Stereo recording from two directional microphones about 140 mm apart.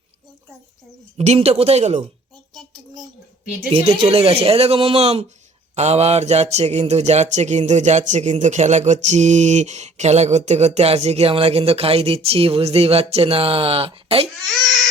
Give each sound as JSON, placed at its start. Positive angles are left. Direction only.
{"t": 1.2, "sound": "speech", "side_deg": -50}
{"t": 3.7, "sound": "speech", "side_deg": -45}